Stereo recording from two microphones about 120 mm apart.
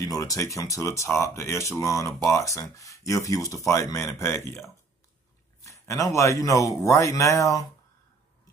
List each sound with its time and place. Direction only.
0.0 s speech: 30° left (ahead or behind)
5.6 s a sound: 25° left (ahead or behind)
6.0 s speech: 25° left (ahead or behind)